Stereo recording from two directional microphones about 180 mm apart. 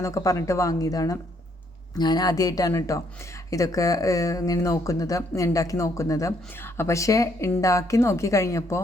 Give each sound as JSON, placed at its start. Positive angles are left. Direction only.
{"t": 0.0, "sound": "speech", "side_deg": 15}